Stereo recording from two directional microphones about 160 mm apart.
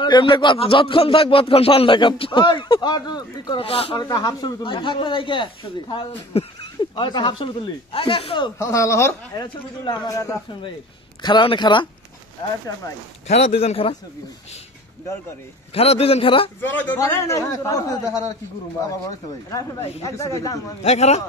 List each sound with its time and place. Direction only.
0.0 s speech: 30° left (ahead or behind)
8.5 s a man's voice: 20° left (ahead or behind)
13.3 s speech: 40° left (ahead or behind)
15.7 s speech: 40° left (ahead or behind)
16.6 s a man's voice: 10° left (ahead or behind)
19.8 s speech: 40° left (ahead or behind)
20.2 s a man's voice: 20° left (ahead or behind)
20.8 s a man's voice: 45° left (ahead or behind)